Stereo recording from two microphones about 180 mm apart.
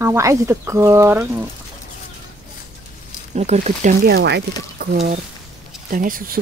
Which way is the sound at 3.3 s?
40° right (ahead or behind).